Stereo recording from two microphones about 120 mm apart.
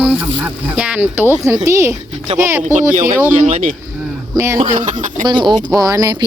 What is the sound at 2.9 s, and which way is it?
Speech, 90° right.